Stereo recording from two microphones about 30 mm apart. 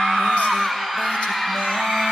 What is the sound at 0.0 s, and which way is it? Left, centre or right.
Music, centre.